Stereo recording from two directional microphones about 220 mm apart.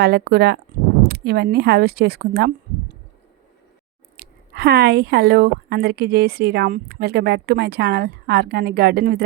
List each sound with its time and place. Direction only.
0.0 s a woman's voice: 45° right (ahead or behind)
4.2 s a woman's voice: 45° right (ahead or behind)